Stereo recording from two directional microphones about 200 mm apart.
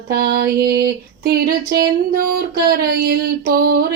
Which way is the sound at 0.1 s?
50° right (ahead or behind).